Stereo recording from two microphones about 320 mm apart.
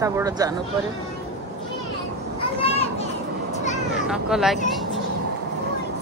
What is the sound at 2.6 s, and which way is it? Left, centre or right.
Children playing, centre.